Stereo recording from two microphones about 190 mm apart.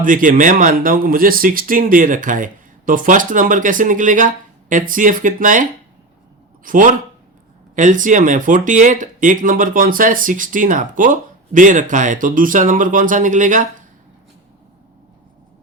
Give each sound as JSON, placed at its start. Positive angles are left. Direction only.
{"t": 0.0, "sound": "speech", "side_deg": -45}
{"t": 6.7, "sound": "speech", "side_deg": -45}